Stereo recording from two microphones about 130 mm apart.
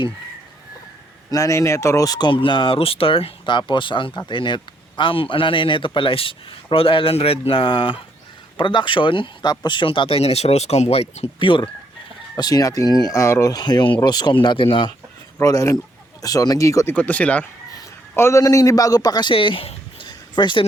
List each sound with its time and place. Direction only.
1.3 s a man's voice: 25° left (ahead or behind); by 11.3 s 50° left (ahead or behind)
11.3 s speech: 40° left (ahead or behind)
15.4 s speech: 25° left (ahead or behind)
16.9 s a man's voice: 10° left (ahead or behind); by 20.7 s 35° left (ahead or behind)